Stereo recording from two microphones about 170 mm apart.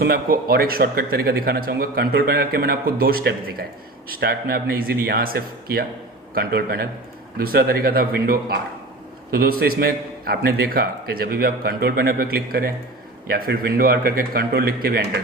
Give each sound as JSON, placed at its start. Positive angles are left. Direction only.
{"t": 0.0, "sound": "a man's voice", "side_deg": -60}